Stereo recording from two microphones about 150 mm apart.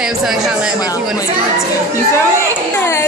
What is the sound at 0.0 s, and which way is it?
Speech, 5° right (ahead or behind).